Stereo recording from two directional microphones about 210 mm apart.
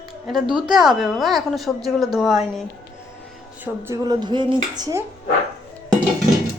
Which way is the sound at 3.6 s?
15° right (ahead or behind).